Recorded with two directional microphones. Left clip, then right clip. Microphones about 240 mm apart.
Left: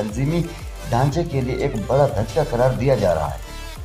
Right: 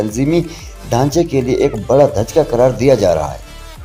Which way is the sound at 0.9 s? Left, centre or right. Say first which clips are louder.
Right 7 dB; right.